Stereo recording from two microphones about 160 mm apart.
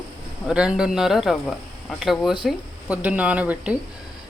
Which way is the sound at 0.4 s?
5° right (ahead or behind).